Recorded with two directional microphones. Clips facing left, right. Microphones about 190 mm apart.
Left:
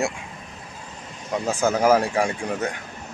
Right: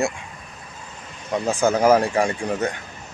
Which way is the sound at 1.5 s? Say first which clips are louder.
Right 2 dB; 5° left (ahead or behind).